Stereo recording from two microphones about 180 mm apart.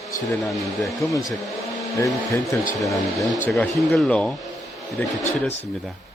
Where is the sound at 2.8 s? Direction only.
Centre (ahead or behind).